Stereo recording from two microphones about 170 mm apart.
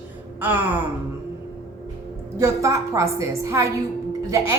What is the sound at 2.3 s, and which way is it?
A woman's voice, 15° right (ahead or behind).